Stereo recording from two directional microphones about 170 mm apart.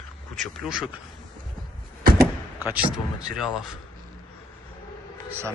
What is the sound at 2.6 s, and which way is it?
Speech, 10° right (ahead or behind).